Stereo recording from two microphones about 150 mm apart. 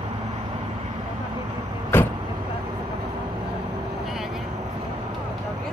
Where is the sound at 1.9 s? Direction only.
15° left (ahead or behind).